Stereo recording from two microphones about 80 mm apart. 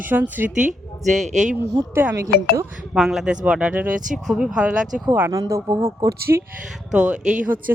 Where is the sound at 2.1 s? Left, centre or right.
Right.